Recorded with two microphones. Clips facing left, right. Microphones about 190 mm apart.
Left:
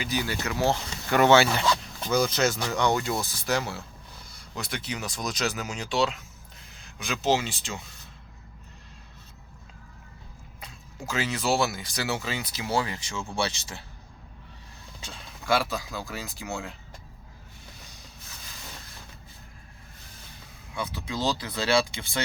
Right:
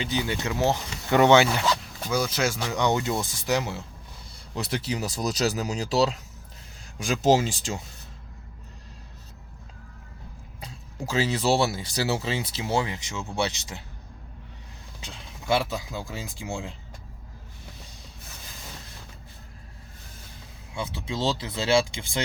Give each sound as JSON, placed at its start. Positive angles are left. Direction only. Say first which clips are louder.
{"t": 0.0, "sound": "speech", "louder": "right 2 dB", "side_deg": -25}
{"t": 4.5, "sound": "speech", "louder": "right 5 dB", "side_deg": -35}
{"t": 10.6, "sound": "speech", "louder": "right 5 dB", "side_deg": -30}
{"t": 15.0, "sound": "speech", "louder": "right 1 dB", "side_deg": -25}
{"t": 20.7, "sound": "speech", "louder": "right 1 dB", "side_deg": -25}